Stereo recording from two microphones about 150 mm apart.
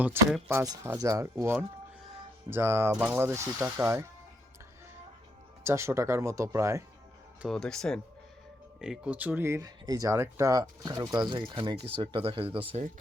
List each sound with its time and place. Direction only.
0.2 s speech: 15° right (ahead or behind)
5.6 s speech: 20° right (ahead or behind)
7.4 s speech: 5° left (ahead or behind)
8.8 s speech: 5° right (ahead or behind); by 12.8 s 35° right (ahead or behind)